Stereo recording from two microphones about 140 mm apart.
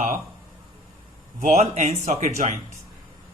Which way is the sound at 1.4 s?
55° right (ahead or behind).